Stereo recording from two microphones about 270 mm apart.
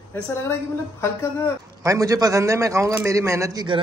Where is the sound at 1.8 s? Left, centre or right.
Centre.